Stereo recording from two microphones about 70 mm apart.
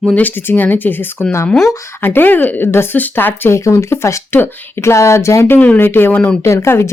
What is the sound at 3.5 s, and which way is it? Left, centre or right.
Speech, left.